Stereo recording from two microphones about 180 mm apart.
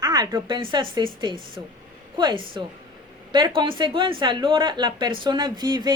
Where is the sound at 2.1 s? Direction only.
25° right (ahead or behind).